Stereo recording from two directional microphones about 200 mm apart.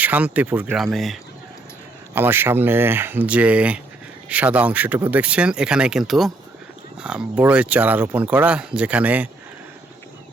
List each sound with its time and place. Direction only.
0.0 s speech: 10° right (ahead or behind)
2.1 s speech: 10° right (ahead or behind)